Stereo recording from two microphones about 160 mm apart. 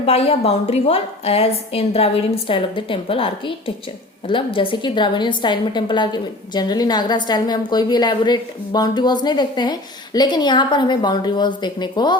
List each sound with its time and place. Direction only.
0.0 s a woman's voice: 40° left (ahead or behind)